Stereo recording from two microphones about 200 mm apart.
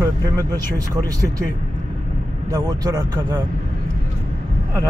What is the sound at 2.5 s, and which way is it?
Speech, 15° right (ahead or behind).